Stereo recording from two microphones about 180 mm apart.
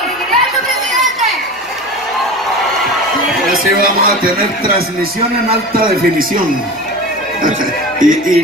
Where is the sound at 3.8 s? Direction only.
55° right (ahead or behind).